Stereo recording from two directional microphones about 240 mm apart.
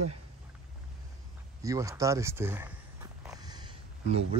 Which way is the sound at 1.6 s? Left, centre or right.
Centre.